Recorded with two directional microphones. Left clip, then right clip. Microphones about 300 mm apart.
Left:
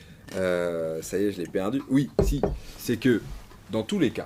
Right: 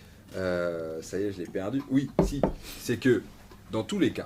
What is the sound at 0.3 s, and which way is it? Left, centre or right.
Speech, left.